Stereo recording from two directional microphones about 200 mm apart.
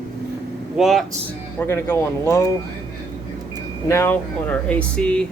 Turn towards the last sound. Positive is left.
turn(degrees=5)  # may be behind; listen again after turning